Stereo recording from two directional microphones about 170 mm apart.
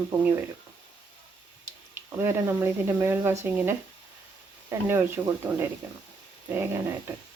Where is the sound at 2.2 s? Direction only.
15° right (ahead or behind).